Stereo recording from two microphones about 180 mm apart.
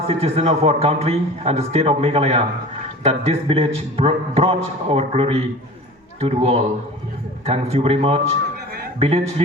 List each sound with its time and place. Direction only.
0.1 s a man's voice: 35° right (ahead or behind)